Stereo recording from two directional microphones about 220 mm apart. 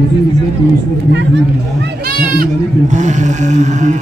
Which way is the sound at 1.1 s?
55° right (ahead or behind).